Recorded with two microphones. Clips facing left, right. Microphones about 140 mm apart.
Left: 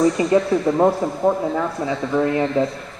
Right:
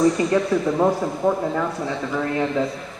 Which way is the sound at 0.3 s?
20° left (ahead or behind).